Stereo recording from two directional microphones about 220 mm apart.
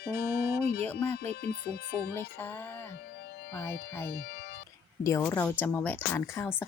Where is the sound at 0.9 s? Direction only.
10° left (ahead or behind).